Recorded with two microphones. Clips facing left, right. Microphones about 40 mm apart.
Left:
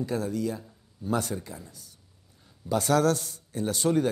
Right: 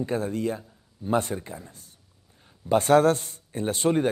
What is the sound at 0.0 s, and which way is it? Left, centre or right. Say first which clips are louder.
Speech: right 2 dB; right.